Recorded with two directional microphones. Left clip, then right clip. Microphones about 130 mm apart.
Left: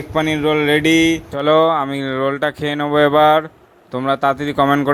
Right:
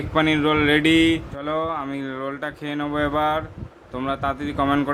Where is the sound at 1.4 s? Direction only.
60° left (ahead or behind).